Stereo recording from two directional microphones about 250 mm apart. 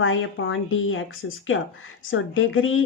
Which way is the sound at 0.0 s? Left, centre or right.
Left.